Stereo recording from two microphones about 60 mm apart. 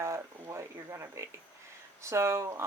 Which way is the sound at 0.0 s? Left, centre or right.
Right.